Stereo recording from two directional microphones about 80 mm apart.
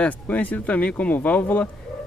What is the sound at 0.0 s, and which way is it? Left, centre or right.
Speech, centre.